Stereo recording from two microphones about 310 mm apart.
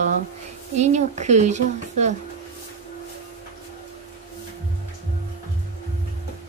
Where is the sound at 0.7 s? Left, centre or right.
Right.